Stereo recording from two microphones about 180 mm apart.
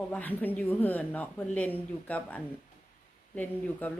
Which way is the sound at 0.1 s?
10° left (ahead or behind).